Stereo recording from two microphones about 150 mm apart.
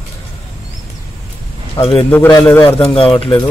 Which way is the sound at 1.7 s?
35° left (ahead or behind).